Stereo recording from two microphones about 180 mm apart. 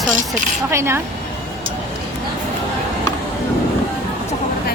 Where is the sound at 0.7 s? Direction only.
15° right (ahead or behind).